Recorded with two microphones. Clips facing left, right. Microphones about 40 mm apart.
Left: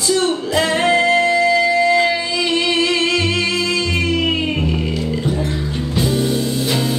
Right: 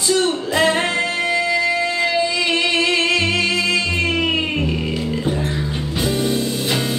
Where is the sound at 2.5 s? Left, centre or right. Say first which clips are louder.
Left 1 dB; right.